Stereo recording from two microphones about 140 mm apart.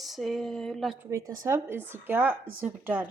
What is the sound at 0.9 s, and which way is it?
Speech, 25° right (ahead or behind).